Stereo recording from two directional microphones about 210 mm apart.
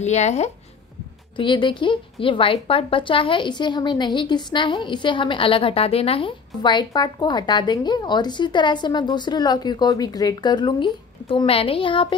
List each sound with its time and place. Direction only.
0.0 s speech: 35° left (ahead or behind)